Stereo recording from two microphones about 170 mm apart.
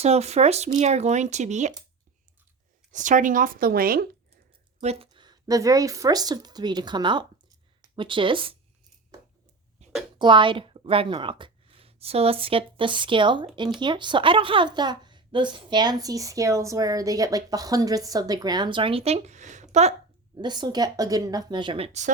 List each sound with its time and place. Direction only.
0.0 s speech: 40° right (ahead or behind)
2.9 s speech: 45° right (ahead or behind)
4.8 s speech: 35° right (ahead or behind)
10.2 s a woman's voice: 30° right (ahead or behind)
20.3 s speech: 25° right (ahead or behind)